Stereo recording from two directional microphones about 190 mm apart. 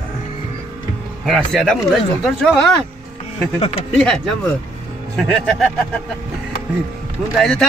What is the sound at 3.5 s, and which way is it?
Speech, 30° left (ahead or behind).